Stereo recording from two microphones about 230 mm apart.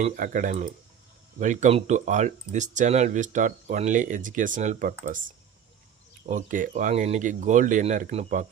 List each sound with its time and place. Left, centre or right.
0.0 s speech: right
6.2 s speech: right